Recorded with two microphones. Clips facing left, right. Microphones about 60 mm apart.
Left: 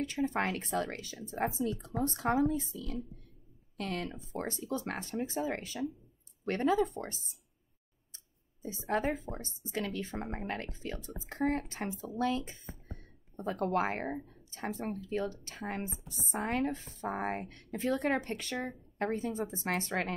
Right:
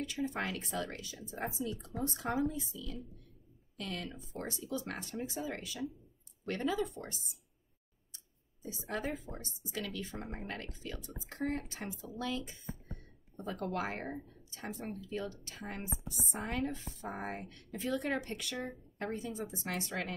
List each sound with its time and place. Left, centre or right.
0.0 s speech: left
2.0 s a woman's voice: left
8.6 s a woman's voice: left
10.7 s speech: left
16.3 s a woman's voice: left
18.6 s speech: left